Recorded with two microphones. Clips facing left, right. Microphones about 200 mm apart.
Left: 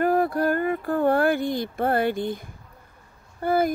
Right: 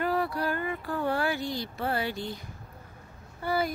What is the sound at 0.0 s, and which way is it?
Speech, 50° left (ahead or behind).